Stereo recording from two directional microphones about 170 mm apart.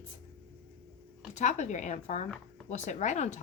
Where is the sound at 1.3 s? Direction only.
45° left (ahead or behind).